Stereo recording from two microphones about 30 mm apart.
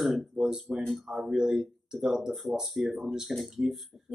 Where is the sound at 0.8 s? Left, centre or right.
Centre.